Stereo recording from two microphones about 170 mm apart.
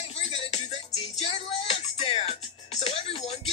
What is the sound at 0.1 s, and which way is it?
Music, 35° left (ahead or behind).